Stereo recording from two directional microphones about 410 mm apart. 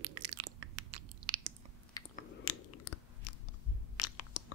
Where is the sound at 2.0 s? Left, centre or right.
Centre.